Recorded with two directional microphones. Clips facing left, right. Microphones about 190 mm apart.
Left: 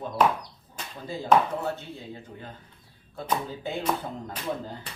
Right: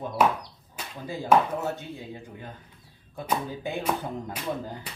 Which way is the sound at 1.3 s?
10° right (ahead or behind).